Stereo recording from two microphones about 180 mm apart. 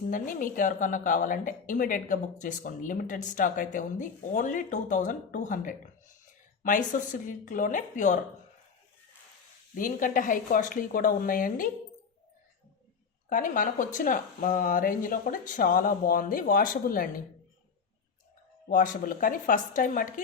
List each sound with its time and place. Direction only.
0.1 s a woman's voice: 50° left (ahead or behind)
9.7 s a woman's voice: 50° left (ahead or behind)
13.3 s a woman's voice: 45° left (ahead or behind)
18.7 s a woman's voice: 50° left (ahead or behind)